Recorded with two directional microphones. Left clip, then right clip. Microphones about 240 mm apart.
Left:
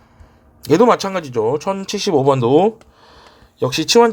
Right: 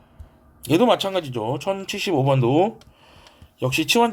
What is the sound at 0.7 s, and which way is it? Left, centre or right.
Speech, left.